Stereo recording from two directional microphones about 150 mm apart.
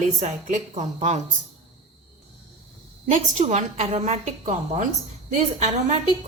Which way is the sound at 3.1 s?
50° right (ahead or behind).